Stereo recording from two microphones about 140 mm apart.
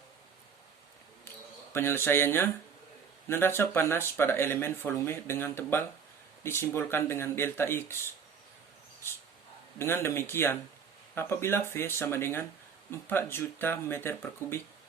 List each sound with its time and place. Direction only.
1.7 s speech: 15° left (ahead or behind)
9.7 s speech: 15° left (ahead or behind)